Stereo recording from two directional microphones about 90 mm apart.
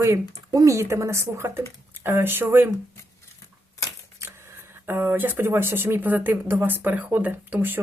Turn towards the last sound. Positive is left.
turn(degrees=-20)  # may be behind; listen again after turning